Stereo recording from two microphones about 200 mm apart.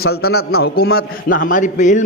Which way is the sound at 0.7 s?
50° left (ahead or behind).